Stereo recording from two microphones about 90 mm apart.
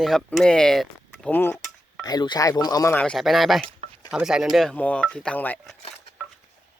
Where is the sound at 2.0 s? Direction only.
50° left (ahead or behind).